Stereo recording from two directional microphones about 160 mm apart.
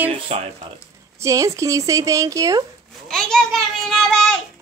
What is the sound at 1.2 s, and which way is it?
Speech, 20° right (ahead or behind).